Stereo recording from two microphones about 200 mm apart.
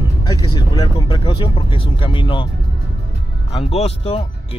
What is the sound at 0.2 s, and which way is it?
Speech, 20° left (ahead or behind).